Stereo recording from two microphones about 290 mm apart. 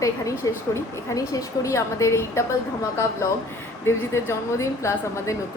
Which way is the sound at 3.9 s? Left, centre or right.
Centre.